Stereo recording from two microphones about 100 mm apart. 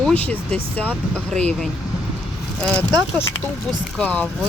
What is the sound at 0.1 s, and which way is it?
Speech, 15° left (ahead or behind).